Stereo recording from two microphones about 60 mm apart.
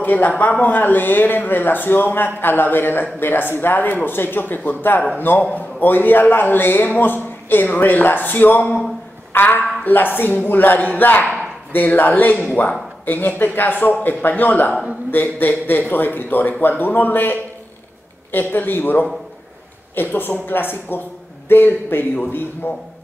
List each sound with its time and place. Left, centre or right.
0.0 s speech: left